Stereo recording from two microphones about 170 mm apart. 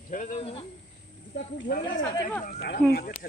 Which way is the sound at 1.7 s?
65° left (ahead or behind).